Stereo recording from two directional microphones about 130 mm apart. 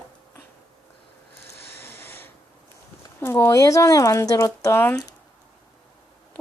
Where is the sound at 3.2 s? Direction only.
20° left (ahead or behind).